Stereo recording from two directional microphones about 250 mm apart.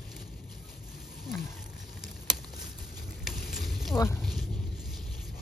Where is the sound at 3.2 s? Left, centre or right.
Centre.